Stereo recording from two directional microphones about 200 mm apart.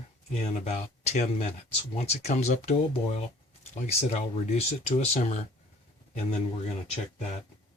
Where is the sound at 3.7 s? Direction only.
35° left (ahead or behind).